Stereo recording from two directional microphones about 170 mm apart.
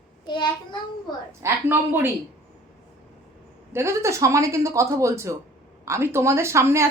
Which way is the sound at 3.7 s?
15° right (ahead or behind).